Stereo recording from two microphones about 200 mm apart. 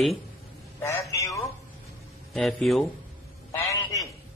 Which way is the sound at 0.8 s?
15° left (ahead or behind).